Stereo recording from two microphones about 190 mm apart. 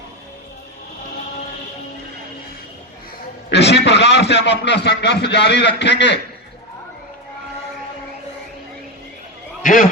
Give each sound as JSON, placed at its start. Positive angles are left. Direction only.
{"t": 3.5, "sound": "a man's voice", "side_deg": 65}